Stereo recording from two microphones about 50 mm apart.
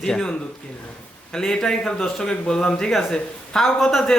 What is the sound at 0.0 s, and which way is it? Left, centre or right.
Speech, centre.